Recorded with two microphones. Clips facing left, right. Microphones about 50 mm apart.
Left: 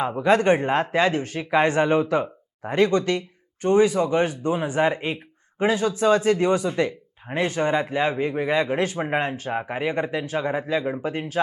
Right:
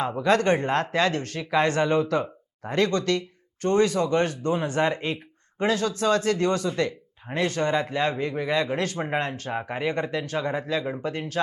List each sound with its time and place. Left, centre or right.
0.0 s speech: centre